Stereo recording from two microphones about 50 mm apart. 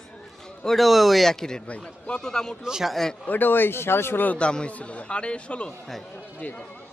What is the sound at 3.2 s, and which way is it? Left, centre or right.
Speech, left.